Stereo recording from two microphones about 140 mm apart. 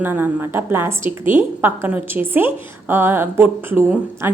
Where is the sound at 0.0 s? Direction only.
15° right (ahead or behind).